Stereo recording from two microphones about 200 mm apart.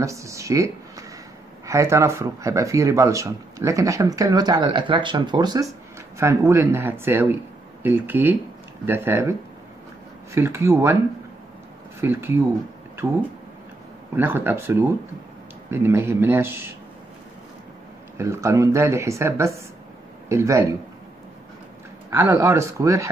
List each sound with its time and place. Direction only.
0.0 s speech: 15° right (ahead or behind)
10.3 s speech: 10° right (ahead or behind)
12.0 s speech: 10° right (ahead or behind)
14.1 s speech: 10° right (ahead or behind)
18.1 s speech: 15° right (ahead or behind)
22.1 s speech: 10° right (ahead or behind)